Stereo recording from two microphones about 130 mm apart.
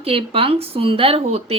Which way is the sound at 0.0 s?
45° right (ahead or behind).